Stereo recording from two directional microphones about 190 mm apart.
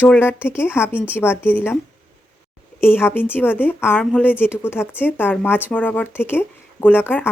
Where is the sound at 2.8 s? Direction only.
10° left (ahead or behind).